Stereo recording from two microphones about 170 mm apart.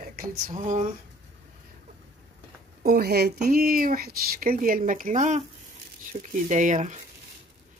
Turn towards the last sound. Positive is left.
turn(degrees=-45)  # may be behind; listen again after turning